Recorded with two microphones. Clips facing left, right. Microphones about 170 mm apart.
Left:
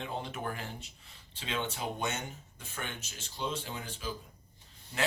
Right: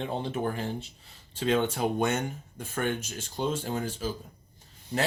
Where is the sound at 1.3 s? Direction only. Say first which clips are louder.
Right 11 dB; 45° right (ahead or behind).